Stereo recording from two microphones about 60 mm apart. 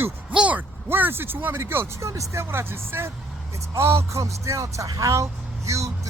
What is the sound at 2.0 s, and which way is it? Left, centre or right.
Speech, right.